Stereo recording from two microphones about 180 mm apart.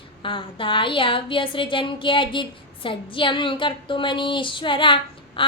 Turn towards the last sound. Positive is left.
turn(degrees=25)  # may be behind; listen again after turning